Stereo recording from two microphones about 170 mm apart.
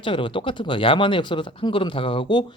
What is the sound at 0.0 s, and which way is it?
A man's voice, 30° left (ahead or behind).